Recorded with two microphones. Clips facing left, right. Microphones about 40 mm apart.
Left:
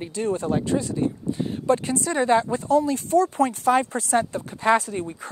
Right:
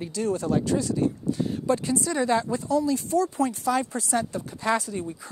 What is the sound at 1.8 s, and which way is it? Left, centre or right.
Speech, left.